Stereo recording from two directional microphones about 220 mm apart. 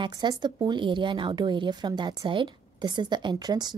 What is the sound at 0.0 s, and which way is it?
A woman's voice, 20° right (ahead or behind).